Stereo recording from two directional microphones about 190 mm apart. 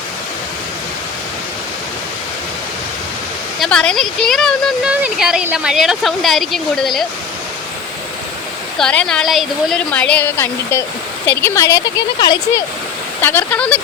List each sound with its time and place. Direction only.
3.6 s speech: 5° left (ahead or behind)
8.8 s speech: 5° left (ahead or behind); by 12.6 s 20° left (ahead or behind)
13.2 s speech: 10° left (ahead or behind)